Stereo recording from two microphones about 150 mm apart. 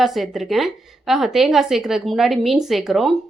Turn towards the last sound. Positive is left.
turn(degrees=0)  # may be behind; listen again after turning